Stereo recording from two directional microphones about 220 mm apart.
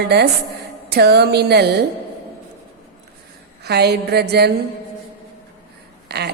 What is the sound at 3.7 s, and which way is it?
Speech, 50° right (ahead or behind).